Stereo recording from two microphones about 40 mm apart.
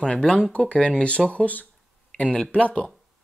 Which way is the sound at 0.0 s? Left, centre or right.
Left.